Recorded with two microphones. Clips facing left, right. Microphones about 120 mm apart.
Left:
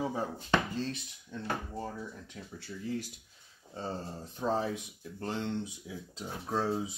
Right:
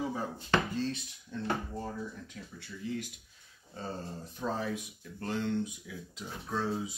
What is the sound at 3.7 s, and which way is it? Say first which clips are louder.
Speech: left 2 dB; 25° left (ahead or behind).